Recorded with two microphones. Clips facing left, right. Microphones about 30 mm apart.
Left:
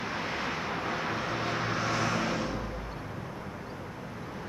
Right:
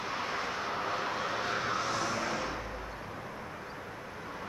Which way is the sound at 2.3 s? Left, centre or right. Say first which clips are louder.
Left 2 dB; centre.